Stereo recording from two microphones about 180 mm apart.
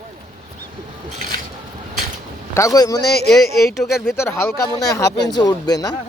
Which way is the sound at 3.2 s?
Centre (ahead or behind).